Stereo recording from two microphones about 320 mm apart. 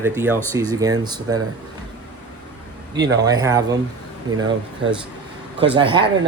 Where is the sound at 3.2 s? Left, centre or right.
Centre.